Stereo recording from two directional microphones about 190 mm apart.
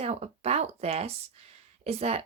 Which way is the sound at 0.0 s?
35° right (ahead or behind).